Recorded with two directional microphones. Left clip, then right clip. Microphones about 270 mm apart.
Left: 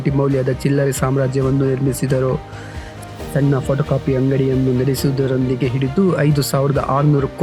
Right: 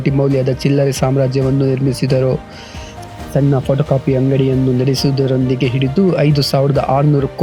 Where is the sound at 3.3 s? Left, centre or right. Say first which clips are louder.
Right 3 dB; centre.